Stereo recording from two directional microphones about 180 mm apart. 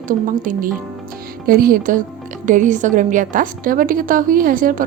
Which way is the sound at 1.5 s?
55° right (ahead or behind).